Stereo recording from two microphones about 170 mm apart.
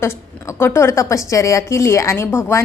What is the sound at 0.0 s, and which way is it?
A woman's voice, 15° left (ahead or behind).